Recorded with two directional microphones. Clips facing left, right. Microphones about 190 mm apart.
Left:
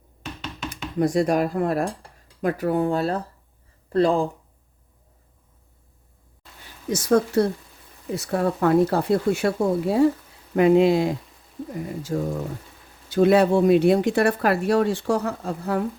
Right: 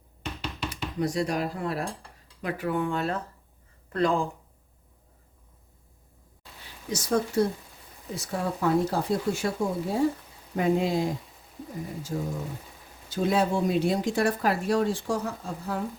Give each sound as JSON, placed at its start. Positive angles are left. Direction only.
{"t": 0.7, "sound": "speech", "side_deg": 50}
{"t": 6.9, "sound": "speech", "side_deg": 65}
{"t": 12.1, "sound": "speech", "side_deg": 65}